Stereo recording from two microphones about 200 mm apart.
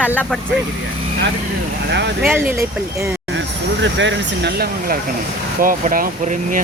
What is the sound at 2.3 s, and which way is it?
Speech, 10° right (ahead or behind).